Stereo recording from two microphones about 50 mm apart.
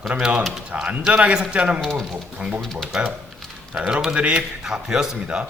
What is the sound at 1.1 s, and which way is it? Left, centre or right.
A man's voice, right.